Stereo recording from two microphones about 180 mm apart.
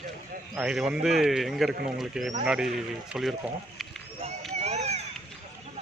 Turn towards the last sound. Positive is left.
turn(degrees=-35)  # may be behind; listen again after turning